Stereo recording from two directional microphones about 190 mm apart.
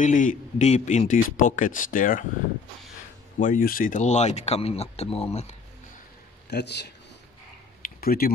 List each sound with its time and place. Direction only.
0.0 s speech: 40° left (ahead or behind)
3.3 s speech: 45° left (ahead or behind)
6.5 s a man's voice: 60° left (ahead or behind)
7.8 s a sound: 50° left (ahead or behind)